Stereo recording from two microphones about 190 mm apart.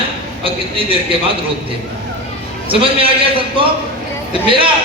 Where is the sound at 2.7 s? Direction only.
30° right (ahead or behind).